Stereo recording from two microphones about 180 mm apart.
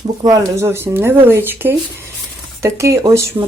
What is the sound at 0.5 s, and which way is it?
Speech, 15° right (ahead or behind).